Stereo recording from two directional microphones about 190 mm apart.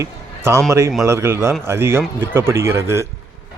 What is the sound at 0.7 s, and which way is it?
Speech, 15° right (ahead or behind).